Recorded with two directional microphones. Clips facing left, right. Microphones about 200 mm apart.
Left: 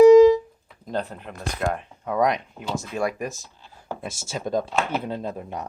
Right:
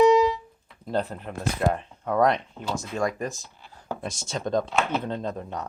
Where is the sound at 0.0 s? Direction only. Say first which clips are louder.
Left 8 dB; 45° left (ahead or behind).